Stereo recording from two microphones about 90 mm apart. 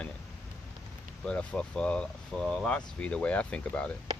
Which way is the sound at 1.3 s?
10° left (ahead or behind).